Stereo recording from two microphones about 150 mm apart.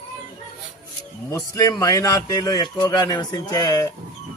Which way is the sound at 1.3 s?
20° left (ahead or behind).